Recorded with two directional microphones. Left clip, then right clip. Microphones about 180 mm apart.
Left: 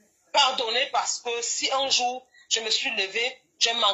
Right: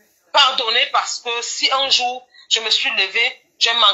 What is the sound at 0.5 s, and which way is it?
Speech, 30° right (ahead or behind).